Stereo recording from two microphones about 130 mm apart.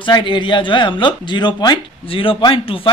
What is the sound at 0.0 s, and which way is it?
Speech, 40° left (ahead or behind).